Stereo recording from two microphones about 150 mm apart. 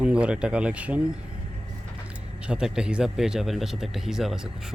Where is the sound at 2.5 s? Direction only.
5° right (ahead or behind).